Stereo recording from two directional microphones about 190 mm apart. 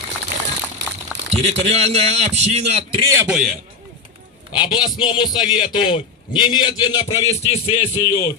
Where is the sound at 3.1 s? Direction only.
15° right (ahead or behind).